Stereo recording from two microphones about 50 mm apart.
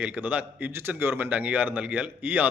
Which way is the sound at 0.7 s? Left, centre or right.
Right.